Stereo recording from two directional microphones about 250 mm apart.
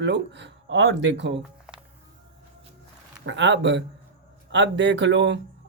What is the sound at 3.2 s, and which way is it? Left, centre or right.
Speech, right.